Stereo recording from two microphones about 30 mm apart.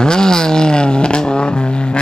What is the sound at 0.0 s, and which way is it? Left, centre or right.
Vehicle, left.